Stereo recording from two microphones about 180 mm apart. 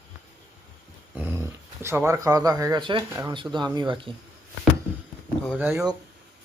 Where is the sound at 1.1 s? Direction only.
10° right (ahead or behind); by 3.0 s 25° right (ahead or behind).